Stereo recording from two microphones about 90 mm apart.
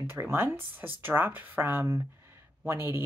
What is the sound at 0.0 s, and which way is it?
Speech, 25° right (ahead or behind).